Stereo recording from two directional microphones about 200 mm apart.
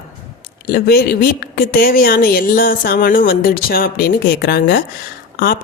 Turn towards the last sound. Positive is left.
turn(degrees=50)  # may be behind; listen again after turning